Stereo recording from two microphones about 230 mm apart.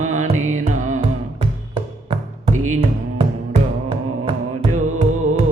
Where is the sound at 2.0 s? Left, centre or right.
Right.